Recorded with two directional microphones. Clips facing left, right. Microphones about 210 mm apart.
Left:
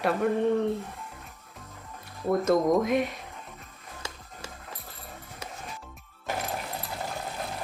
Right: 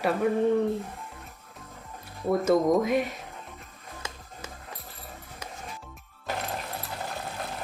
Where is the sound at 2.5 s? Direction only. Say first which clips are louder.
Right 1 dB; centre (ahead or behind).